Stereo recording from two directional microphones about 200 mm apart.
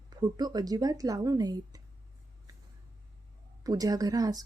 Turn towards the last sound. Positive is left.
turn(degrees=-20)  # may be behind; listen again after turning